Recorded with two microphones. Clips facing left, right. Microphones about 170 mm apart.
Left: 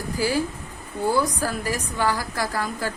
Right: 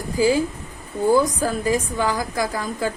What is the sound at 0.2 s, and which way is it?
A woman's voice, 20° right (ahead or behind).